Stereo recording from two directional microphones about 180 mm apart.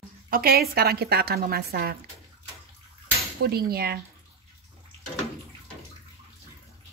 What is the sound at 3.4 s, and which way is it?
Speech, 60° right (ahead or behind).